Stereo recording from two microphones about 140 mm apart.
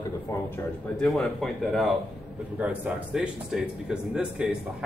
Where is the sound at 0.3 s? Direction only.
25° left (ahead or behind).